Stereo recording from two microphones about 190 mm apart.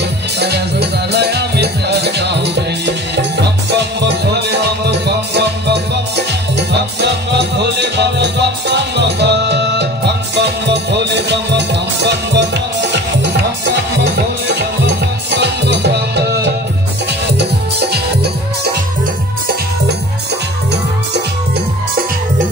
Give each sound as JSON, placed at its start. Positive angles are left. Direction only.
{"t": 0.4, "sound": "music", "side_deg": -60}
{"t": 3.7, "sound": "music", "side_deg": -65}
{"t": 15.4, "sound": "music", "side_deg": -60}